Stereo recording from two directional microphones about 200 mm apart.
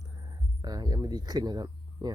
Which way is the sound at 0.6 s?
20° right (ahead or behind).